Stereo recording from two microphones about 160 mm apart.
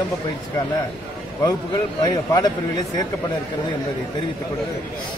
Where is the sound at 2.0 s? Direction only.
25° left (ahead or behind).